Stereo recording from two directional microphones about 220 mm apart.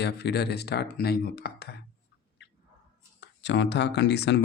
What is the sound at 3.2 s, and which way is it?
Speech, 55° left (ahead or behind).